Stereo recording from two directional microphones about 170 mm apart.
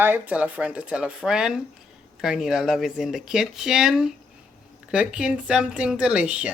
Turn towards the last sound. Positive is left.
turn(degrees=-5)  # may be behind; listen again after turning